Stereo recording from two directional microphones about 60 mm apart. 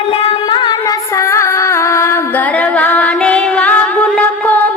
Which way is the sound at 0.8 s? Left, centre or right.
Left.